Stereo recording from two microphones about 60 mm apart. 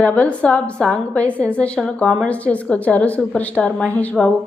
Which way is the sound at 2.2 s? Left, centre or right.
Left.